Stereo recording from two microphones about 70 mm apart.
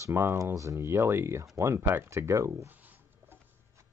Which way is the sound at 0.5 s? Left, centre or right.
Right.